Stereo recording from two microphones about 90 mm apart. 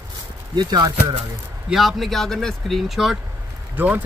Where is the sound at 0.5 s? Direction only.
55° right (ahead or behind).